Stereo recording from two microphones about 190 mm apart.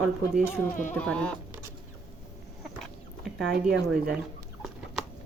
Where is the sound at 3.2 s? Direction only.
Centre (ahead or behind).